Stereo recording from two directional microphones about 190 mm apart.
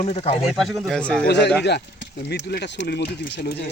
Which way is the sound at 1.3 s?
60° left (ahead or behind).